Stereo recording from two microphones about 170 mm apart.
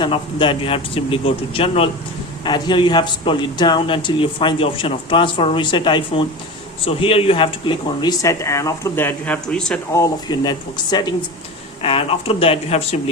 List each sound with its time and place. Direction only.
0.0 s a man's voice: 30° left (ahead or behind); by 9.8 s 5° left (ahead or behind)
9.9 s a man's voice: 20° left (ahead or behind)
11.8 s speech: 35° left (ahead or behind)